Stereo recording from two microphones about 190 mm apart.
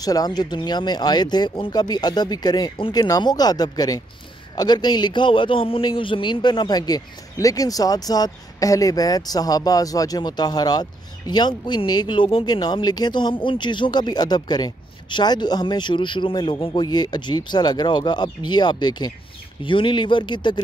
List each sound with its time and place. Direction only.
0.0 s a man's voice: 20° left (ahead or behind)